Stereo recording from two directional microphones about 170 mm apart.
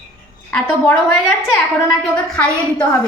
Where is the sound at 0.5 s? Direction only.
5° left (ahead or behind).